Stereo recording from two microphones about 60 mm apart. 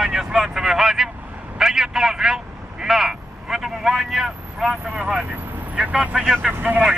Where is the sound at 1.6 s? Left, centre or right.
Centre.